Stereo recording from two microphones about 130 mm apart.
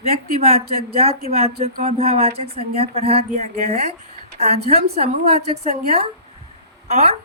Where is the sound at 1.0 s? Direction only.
50° right (ahead or behind).